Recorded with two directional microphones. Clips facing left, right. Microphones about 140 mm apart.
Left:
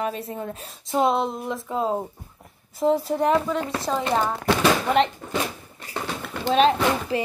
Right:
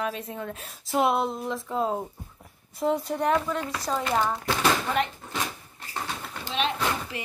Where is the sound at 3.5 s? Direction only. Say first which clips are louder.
Left 5 dB; 30° left (ahead or behind).